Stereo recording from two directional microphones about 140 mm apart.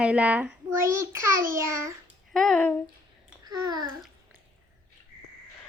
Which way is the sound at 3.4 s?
30° right (ahead or behind).